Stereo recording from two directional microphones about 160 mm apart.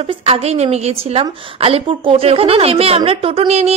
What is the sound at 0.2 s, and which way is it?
Speech, 40° right (ahead or behind).